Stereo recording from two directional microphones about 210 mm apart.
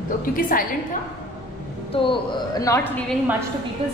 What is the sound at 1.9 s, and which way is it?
A woman's voice, 25° left (ahead or behind).